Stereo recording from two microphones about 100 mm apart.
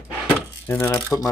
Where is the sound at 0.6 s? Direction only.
20° left (ahead or behind).